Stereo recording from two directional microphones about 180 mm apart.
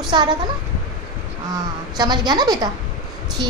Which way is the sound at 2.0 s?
25° right (ahead or behind).